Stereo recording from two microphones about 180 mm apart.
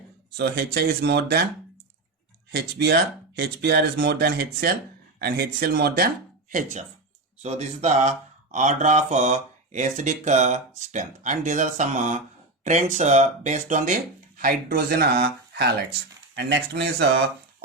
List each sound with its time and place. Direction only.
0.3 s speech: 65° right (ahead or behind)
2.6 s speech: 65° right (ahead or behind)
6.5 s speech: 45° right (ahead or behind); by 17.1 s 75° right (ahead or behind)